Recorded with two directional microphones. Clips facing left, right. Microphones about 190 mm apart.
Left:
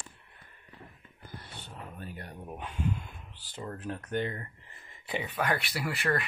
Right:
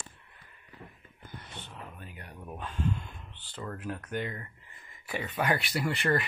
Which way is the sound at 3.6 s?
25° left (ahead or behind).